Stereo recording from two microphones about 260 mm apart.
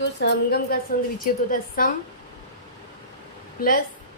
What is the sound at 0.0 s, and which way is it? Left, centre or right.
A woman's voice, left.